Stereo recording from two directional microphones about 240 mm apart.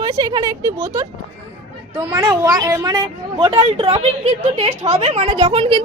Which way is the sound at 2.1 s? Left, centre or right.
Centre.